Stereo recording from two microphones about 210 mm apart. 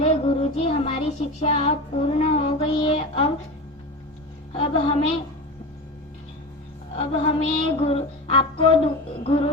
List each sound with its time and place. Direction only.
0.0 s child singing: 30° left (ahead or behind)
4.5 s a woman's voice: 25° left (ahead or behind)
6.9 s a sound: 25° left (ahead or behind)
9.2 s a woman's voice: 25° left (ahead or behind)